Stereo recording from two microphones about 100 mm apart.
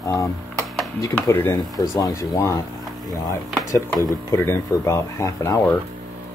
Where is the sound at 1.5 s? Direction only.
35° left (ahead or behind).